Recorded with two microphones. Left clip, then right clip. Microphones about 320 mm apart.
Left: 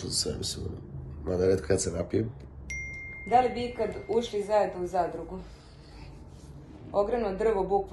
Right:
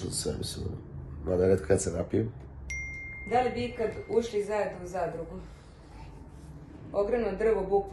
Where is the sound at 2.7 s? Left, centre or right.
Centre.